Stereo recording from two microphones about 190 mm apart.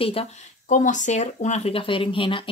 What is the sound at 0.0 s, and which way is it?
Speech, 30° left (ahead or behind).